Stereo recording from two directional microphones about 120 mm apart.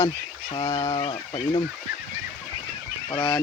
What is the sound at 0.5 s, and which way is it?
Speech, 55° left (ahead or behind).